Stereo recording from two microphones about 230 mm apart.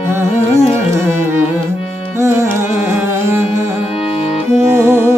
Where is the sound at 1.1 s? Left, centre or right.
Centre.